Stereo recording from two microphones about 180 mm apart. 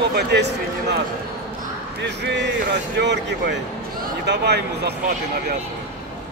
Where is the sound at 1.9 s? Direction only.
75° right (ahead or behind).